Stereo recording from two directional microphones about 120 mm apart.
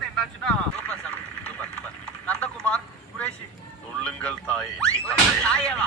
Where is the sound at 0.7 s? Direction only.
10° left (ahead or behind).